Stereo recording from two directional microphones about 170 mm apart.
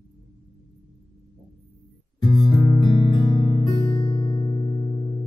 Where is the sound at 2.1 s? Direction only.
25° left (ahead or behind).